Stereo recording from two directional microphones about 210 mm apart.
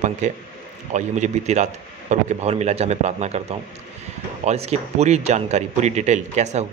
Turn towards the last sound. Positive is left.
turn(degrees=-35)  # may be behind; listen again after turning